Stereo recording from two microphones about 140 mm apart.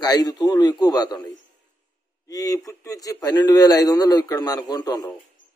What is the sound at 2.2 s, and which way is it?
A man's voice, 25° left (ahead or behind).